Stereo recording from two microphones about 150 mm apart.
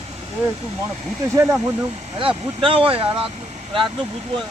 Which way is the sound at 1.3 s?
15° right (ahead or behind).